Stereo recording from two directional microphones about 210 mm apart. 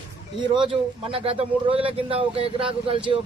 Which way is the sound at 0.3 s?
20° right (ahead or behind).